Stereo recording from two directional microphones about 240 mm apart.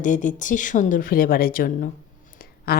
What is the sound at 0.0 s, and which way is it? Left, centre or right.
A woman's voice, left.